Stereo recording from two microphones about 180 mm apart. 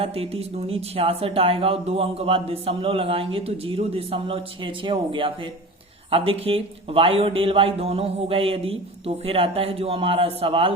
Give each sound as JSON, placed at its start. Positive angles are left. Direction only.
{"t": 0.0, "sound": "speech", "side_deg": -35}